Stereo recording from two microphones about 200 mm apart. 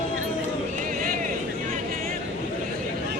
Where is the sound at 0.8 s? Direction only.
45° right (ahead or behind).